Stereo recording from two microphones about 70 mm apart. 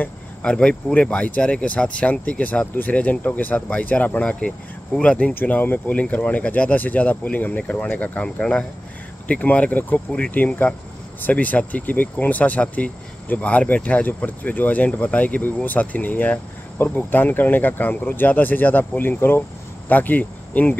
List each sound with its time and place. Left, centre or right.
0.0 s speech: centre
5.3 s speech: left